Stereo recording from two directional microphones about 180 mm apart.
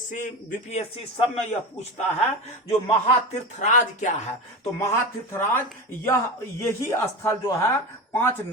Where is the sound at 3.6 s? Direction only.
45° left (ahead or behind).